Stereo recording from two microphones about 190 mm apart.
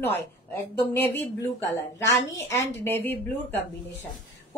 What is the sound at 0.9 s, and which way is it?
A woman's voice, 10° left (ahead or behind).